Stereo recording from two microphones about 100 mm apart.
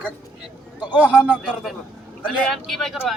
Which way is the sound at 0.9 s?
15° right (ahead or behind).